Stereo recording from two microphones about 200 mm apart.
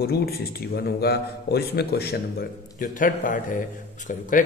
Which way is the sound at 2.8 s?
40° left (ahead or behind).